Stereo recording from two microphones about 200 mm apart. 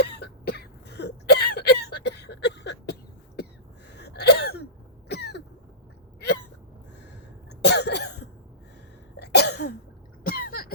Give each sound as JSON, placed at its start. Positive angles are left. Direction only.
{"t": 0.0, "sound": "a sound", "side_deg": 55}
{"t": 3.9, "sound": "sneeze", "side_deg": 55}
{"t": 5.0, "sound": "cough", "side_deg": 55}
{"t": 7.6, "sound": "cough", "side_deg": 55}
{"t": 9.1, "sound": "cough", "side_deg": 55}